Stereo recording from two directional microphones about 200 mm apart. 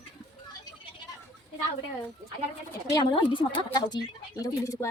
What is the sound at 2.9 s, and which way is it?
A woman's voice, 25° left (ahead or behind).